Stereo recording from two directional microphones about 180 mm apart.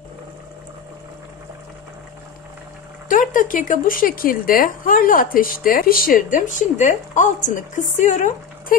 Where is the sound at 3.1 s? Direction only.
45° left (ahead or behind).